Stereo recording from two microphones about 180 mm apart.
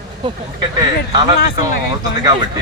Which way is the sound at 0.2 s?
25° right (ahead or behind).